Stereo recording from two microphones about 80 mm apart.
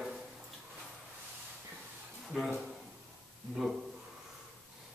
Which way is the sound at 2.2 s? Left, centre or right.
Centre.